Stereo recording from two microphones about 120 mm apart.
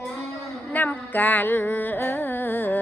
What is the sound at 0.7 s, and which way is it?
Carnatic music, 15° left (ahead or behind).